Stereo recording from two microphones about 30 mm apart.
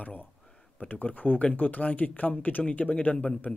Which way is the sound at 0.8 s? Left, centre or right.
Left.